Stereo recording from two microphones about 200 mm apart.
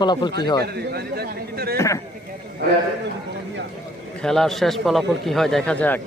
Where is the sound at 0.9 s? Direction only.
50° right (ahead or behind).